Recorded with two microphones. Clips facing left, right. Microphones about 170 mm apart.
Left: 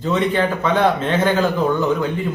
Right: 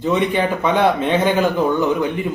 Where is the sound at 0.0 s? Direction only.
15° right (ahead or behind).